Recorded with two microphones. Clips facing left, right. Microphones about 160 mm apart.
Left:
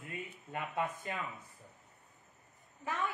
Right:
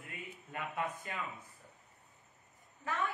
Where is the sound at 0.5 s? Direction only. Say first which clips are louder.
Left 2 dB; 25° left (ahead or behind).